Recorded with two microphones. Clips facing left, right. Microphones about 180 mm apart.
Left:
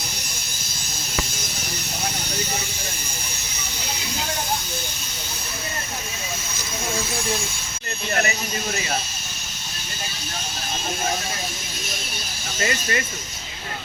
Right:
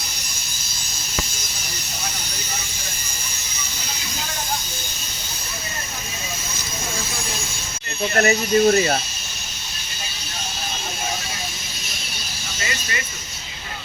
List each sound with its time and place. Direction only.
8.1 s speech: 45° right (ahead or behind)
12.5 s speech: 50° left (ahead or behind)